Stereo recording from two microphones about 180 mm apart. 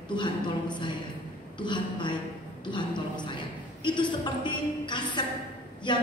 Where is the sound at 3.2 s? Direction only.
25° left (ahead or behind).